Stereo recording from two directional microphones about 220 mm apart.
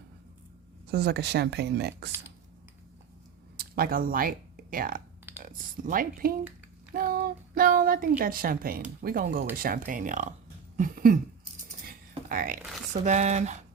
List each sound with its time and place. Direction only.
0.9 s speech: 45° right (ahead or behind)
3.6 s speech: 40° right (ahead or behind)
6.9 s child singing: 40° right (ahead or behind)
8.2 s speech: 40° right (ahead or behind)
10.8 s a sound: 40° right (ahead or behind)
12.3 s speech: 40° right (ahead or behind)